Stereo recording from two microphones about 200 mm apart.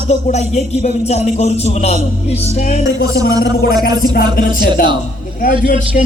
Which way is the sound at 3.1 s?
50° left (ahead or behind).